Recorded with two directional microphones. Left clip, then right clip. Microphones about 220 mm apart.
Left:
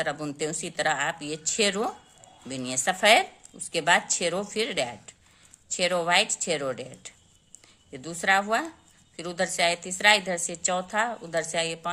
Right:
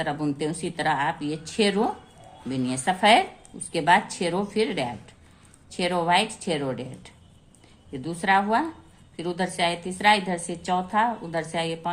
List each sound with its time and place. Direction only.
0.0 s a woman's voice: 40° left (ahead or behind)